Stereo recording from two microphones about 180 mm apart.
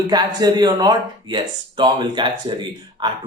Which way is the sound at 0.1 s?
20° right (ahead or behind).